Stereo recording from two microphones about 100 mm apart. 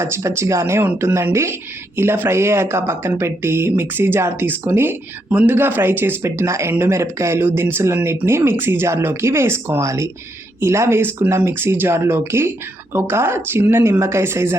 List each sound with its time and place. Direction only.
0.0 s speech: 30° right (ahead or behind)